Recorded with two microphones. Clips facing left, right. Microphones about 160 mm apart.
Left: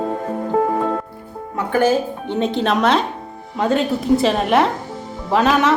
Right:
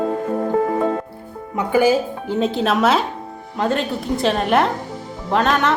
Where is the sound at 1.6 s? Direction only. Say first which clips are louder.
Right 1 dB; 10° right (ahead or behind).